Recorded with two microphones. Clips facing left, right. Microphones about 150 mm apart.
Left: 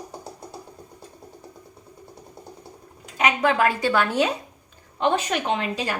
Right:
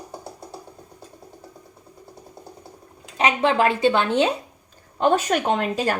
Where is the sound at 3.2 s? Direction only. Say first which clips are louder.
Right 1 dB; 30° right (ahead or behind).